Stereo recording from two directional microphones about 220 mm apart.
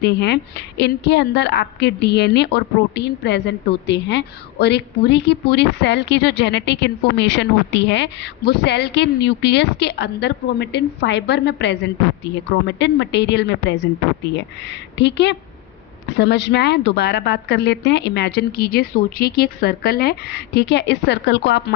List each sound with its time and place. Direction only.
0.0 s a woman's voice: 50° left (ahead or behind)